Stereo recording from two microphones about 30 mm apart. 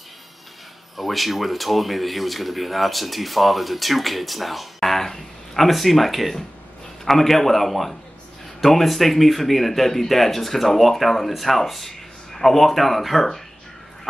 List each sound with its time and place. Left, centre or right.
0.9 s speech: centre
5.7 s a man's voice: centre